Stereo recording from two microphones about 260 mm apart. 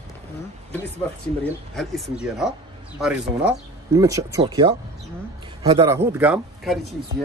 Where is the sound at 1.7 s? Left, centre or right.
Centre.